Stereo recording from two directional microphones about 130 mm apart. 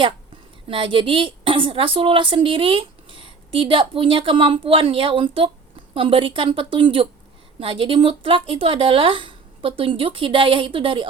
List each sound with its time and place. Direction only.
0.7 s a woman's voice: 40° right (ahead or behind)